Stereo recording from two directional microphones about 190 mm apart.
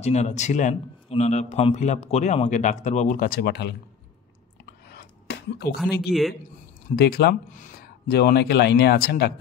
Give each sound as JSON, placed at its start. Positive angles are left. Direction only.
{"t": 0.0, "sound": "speech", "side_deg": 35}
{"t": 4.9, "sound": "a sound", "side_deg": 60}
{"t": 5.9, "sound": "speech", "side_deg": 55}